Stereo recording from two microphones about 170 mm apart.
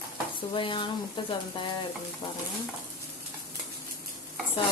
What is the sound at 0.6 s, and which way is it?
Speech, 30° left (ahead or behind).